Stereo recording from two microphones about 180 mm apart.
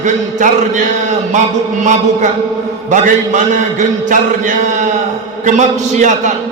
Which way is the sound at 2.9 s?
45° right (ahead or behind).